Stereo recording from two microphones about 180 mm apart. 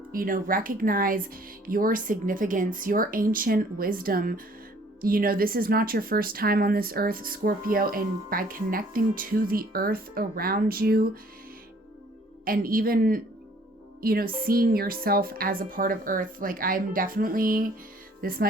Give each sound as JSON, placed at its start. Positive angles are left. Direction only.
{"t": 0.1, "sound": "speech", "side_deg": -50}
{"t": 12.5, "sound": "speech", "side_deg": -50}
{"t": 18.2, "sound": "music", "side_deg": -55}